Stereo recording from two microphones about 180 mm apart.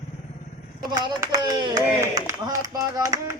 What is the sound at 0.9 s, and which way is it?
A man's voice, 25° right (ahead or behind).